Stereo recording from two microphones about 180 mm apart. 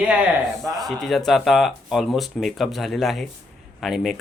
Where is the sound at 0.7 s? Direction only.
Centre (ahead or behind).